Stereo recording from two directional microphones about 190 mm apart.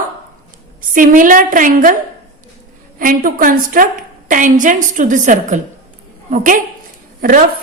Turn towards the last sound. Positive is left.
turn(degrees=-50)  # may be behind; listen again after turning